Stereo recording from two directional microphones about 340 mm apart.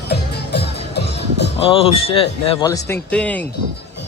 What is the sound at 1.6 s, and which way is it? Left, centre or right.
Speech, centre.